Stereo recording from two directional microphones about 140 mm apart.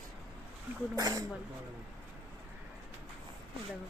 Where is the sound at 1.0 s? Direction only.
25° right (ahead or behind).